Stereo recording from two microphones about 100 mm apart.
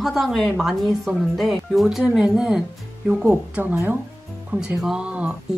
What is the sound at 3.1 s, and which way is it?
A woman's voice, 20° right (ahead or behind).